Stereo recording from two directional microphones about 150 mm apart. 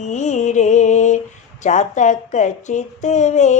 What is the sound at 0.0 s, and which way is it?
Music, 50° left (ahead or behind).